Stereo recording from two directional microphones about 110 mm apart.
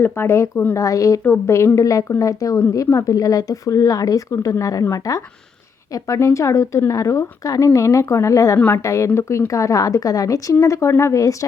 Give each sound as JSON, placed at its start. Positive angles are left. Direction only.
{"t": 0.0, "sound": "a woman's voice", "side_deg": 20}
{"t": 8.5, "sound": "a woman's voice", "side_deg": 15}
{"t": 8.8, "sound": "a woman's voice", "side_deg": 25}